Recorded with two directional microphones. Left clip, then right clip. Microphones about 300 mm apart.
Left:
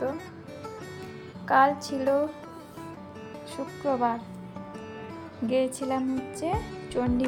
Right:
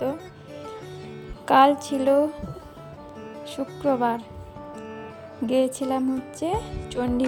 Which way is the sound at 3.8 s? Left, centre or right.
Right.